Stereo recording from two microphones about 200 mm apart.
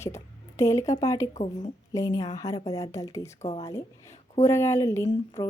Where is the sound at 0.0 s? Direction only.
15° left (ahead or behind).